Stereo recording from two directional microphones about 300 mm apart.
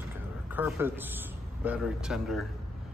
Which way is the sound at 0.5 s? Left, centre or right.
Centre.